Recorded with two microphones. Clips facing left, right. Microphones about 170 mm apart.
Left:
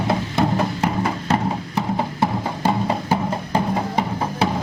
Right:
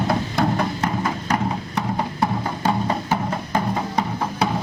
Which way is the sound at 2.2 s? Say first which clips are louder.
Left 1 dB; 10° left (ahead or behind).